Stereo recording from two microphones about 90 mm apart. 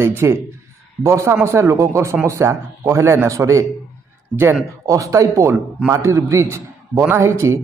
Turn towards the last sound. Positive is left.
turn(degrees=-30)  # may be behind; listen again after turning